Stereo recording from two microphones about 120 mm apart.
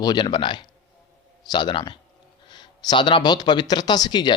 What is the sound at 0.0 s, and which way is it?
Speech, 35° left (ahead or behind).